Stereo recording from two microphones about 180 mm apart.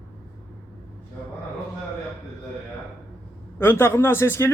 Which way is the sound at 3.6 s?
10° left (ahead or behind).